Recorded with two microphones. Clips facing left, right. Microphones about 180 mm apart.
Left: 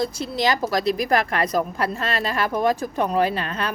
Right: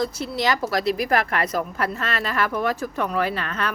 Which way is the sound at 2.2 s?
15° left (ahead or behind).